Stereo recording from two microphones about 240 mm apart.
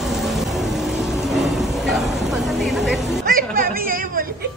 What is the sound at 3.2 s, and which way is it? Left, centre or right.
Chatter, right.